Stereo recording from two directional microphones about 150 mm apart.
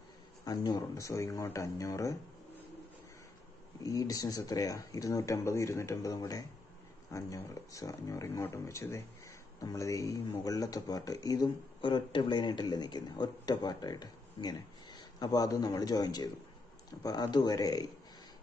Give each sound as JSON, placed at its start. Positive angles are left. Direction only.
{"t": 0.5, "sound": "speech", "side_deg": 25}
{"t": 3.8, "sound": "speech", "side_deg": 25}